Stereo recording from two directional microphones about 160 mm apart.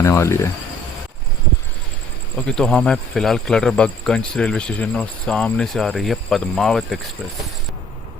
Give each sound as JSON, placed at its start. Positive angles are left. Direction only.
{"t": 0.0, "sound": "speech", "side_deg": 20}
{"t": 2.5, "sound": "speech", "side_deg": 5}